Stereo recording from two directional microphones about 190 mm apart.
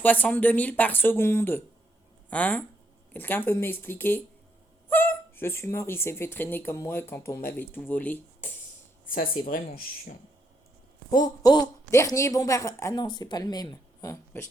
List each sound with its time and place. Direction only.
0.0 s speech: 10° left (ahead or behind)
9.0 s speech: 50° left (ahead or behind)
11.4 s speech: 20° left (ahead or behind)